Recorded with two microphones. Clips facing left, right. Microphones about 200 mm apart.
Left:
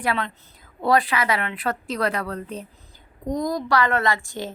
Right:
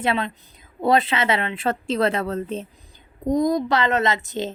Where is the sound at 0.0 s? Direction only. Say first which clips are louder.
Right 2 dB; 25° right (ahead or behind).